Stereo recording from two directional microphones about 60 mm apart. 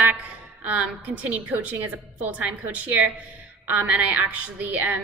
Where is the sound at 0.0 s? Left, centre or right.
Right.